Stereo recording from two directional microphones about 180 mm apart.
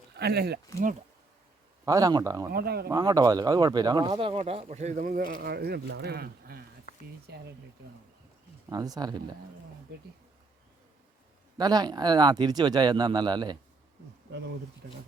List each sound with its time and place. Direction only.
0.2 s speech: 65° right (ahead or behind)
1.8 s speech: 20° right (ahead or behind)
2.5 s speech: 60° right (ahead or behind)
2.9 s speech: 20° right (ahead or behind); by 7.4 s 65° right (ahead or behind)
8.7 s speech: 20° right (ahead or behind)
11.5 s speech: 20° right (ahead or behind)
14.8 s speech: 65° right (ahead or behind)